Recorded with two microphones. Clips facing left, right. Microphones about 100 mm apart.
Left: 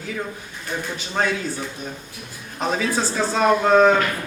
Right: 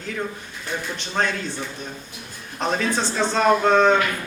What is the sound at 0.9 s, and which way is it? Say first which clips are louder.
Speech: left 2 dB; 5° left (ahead or behind).